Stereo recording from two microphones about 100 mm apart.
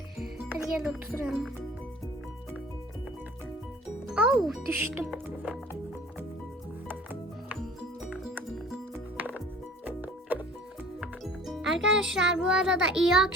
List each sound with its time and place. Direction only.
0.3 s music: 15° right (ahead or behind)
0.6 s speech: 5° right (ahead or behind)
4.1 s speech: 10° right (ahead or behind)
6.8 s music: 20° right (ahead or behind)
11.2 s a child's voice: centre (ahead or behind)